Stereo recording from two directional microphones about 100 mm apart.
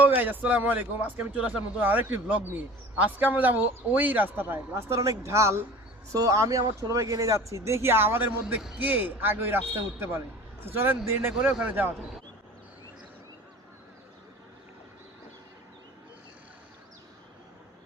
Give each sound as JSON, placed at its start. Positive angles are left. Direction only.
{"t": 0.0, "sound": "a man's voice", "side_deg": -15}
{"t": 11.3, "sound": "speech", "side_deg": -10}